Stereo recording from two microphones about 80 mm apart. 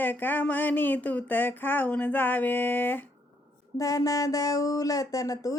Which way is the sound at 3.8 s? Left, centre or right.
Left.